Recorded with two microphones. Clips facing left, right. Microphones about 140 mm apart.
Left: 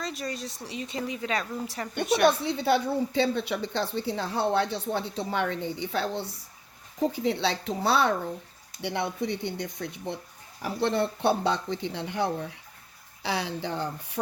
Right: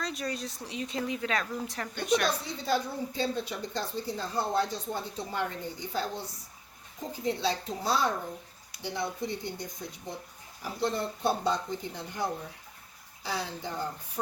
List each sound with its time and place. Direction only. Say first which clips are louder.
0.0 s a woman's voice: left 1 dB; centre (ahead or behind)
2.2 s a woman's voice: left 8 dB; 65° left (ahead or behind)